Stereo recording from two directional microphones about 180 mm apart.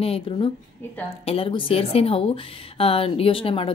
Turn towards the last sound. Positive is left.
turn(degrees=30)  # may be behind; listen again after turning